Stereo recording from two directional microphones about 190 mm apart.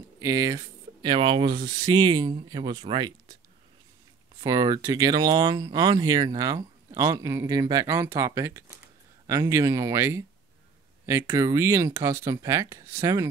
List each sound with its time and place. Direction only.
0.2 s speech: 20° right (ahead or behind)
4.4 s speech: 20° right (ahead or behind)